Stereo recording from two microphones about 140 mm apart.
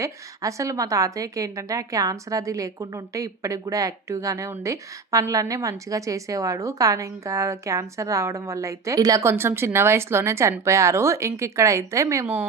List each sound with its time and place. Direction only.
0.0 s speech: 20° right (ahead or behind)